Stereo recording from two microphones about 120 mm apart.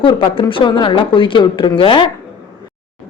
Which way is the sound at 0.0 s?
45° left (ahead or behind).